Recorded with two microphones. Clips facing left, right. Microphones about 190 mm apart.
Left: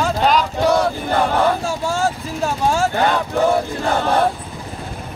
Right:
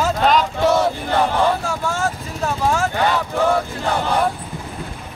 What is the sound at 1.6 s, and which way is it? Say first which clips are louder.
Speech: left 2 dB; 30° left (ahead or behind).